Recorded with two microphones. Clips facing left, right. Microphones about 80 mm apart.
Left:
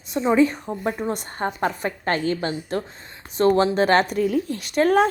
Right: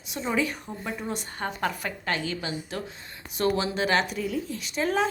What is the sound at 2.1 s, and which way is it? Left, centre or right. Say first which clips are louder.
A woman's voice: left 7 dB; left.